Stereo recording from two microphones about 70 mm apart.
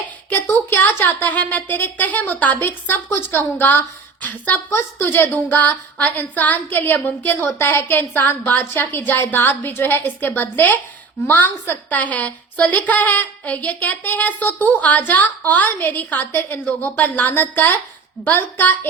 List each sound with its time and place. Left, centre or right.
0.3 s a woman's voice: left
7.6 s a woman's voice: left
16.3 s a woman's voice: left
16.6 s a woman's voice: left